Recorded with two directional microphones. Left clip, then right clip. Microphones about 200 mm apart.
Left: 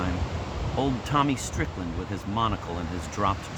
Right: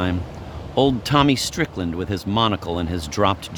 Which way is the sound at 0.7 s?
65° right (ahead or behind).